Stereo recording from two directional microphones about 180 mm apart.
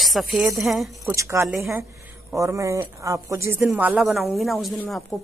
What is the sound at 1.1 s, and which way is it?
Speech, 15° right (ahead or behind).